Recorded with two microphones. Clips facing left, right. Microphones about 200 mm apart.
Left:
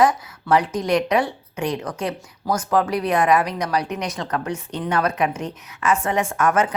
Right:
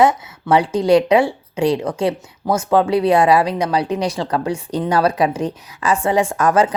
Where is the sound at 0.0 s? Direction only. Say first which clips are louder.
Right 3 dB; 25° right (ahead or behind).